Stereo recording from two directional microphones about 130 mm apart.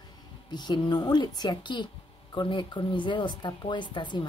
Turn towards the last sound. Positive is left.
turn(degrees=35)  # may be behind; listen again after turning